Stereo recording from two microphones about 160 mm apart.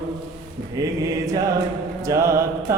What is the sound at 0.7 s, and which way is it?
Mantra, 20° right (ahead or behind).